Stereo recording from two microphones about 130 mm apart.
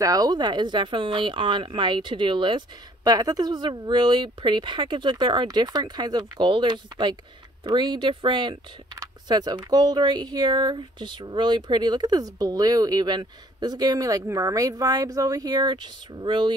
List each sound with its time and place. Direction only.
0.0 s speech: 30° right (ahead or behind)